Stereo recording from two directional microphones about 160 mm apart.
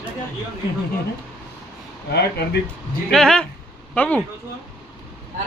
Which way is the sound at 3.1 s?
5° left (ahead or behind).